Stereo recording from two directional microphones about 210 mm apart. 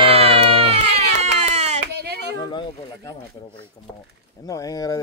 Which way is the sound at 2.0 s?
50° right (ahead or behind).